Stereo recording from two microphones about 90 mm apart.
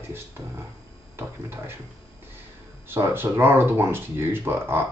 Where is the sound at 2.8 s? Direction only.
25° right (ahead or behind).